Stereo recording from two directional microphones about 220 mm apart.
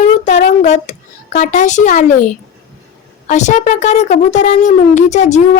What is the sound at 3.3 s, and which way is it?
Speech, 35° left (ahead or behind).